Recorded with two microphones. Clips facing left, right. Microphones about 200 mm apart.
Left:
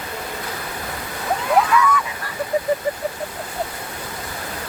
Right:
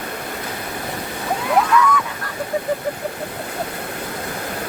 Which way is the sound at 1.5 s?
5° left (ahead or behind).